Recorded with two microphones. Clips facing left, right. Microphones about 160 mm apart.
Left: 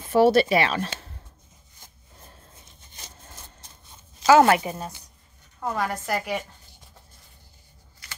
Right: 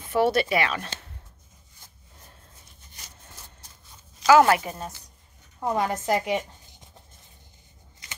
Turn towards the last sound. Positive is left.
turn(degrees=-20)  # may be behind; listen again after turning